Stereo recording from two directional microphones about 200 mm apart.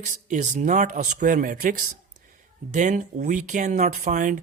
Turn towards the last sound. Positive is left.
turn(degrees=-40)  # may be behind; listen again after turning